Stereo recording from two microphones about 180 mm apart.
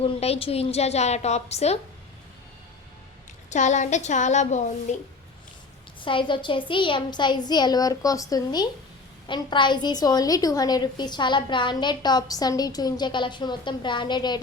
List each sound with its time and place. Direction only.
0.0 s a woman's voice: 35° left (ahead or behind)
3.5 s a woman's voice: 40° left (ahead or behind)
6.0 s a woman's voice: 30° left (ahead or behind)